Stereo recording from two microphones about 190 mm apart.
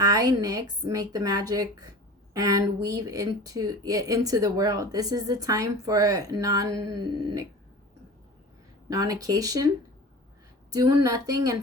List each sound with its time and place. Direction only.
0.0 s speech: 20° right (ahead or behind)
8.9 s speech: 20° right (ahead or behind)